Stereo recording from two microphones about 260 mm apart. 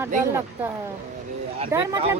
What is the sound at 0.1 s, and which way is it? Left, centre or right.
Speech, right.